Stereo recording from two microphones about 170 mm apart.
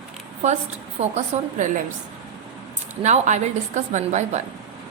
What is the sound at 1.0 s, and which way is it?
Speech, 40° right (ahead or behind).